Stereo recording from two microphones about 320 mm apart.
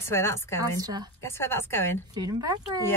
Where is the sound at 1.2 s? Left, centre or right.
Centre.